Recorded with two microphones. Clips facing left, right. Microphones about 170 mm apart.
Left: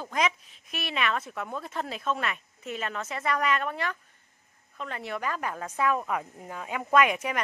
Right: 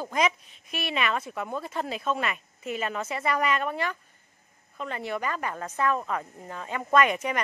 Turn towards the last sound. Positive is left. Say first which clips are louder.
# right 1 dB
turn(degrees=5)  # may be behind; listen again after turning